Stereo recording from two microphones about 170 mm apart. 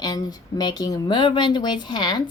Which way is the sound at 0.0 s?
25° left (ahead or behind).